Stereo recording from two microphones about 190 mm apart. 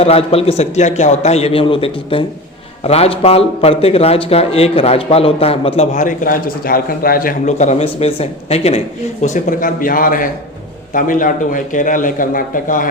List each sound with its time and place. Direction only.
0.0 s a man's voice: 30° left (ahead or behind)